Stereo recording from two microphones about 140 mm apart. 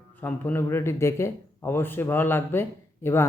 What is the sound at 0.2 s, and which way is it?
A man's voice, 10° left (ahead or behind).